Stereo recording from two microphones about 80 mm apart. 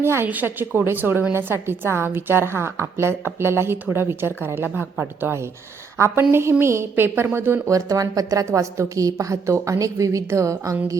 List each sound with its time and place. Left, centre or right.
0.0 s a woman's voice: right
0.3 s a woman's voice: right
7.7 s a woman's voice: right